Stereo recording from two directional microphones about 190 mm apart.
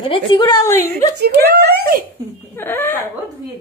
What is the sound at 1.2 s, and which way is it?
Speech, 60° right (ahead or behind).